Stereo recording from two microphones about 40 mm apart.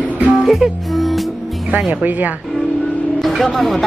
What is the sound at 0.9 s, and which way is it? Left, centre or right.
Music, centre.